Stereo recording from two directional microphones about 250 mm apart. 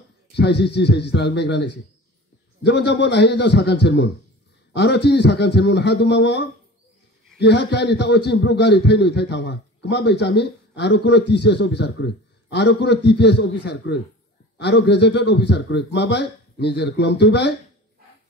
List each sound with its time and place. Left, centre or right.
0.3 s a man's voice: left